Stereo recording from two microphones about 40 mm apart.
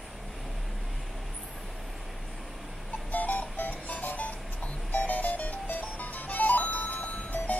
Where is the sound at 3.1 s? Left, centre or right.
Left.